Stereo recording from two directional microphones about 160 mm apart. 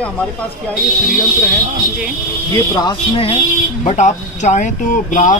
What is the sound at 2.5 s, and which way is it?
Speech, 20° left (ahead or behind).